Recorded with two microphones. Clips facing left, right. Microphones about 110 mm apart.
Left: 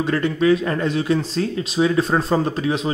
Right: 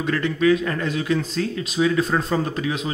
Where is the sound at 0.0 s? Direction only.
25° left (ahead or behind).